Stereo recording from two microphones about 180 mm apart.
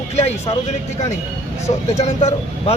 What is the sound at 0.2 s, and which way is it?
Speech, 35° left (ahead or behind).